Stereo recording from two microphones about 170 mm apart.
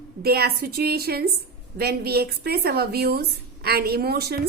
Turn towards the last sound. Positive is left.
turn(degrees=-65)  # may be behind; listen again after turning